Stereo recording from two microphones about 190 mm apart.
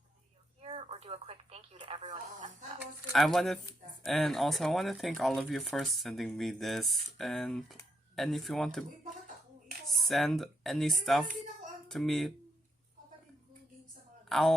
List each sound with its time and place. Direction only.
0.6 s speech: 30° right (ahead or behind)
3.1 s speech: centre (ahead or behind)
10.0 s a child's voice: centre (ahead or behind)
14.3 s speech: centre (ahead or behind)